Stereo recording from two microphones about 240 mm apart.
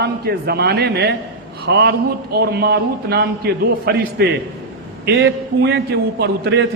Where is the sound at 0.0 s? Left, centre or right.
Right.